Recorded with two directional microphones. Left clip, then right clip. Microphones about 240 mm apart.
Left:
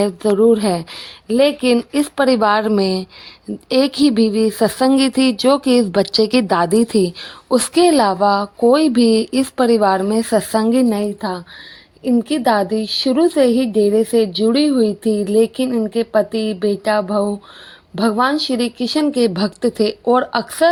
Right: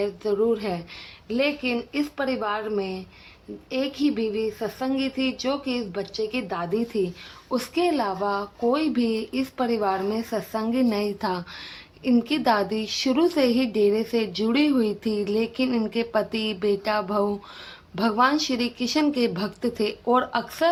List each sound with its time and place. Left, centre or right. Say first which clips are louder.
0.0 s a woman's voice: left 10 dB; left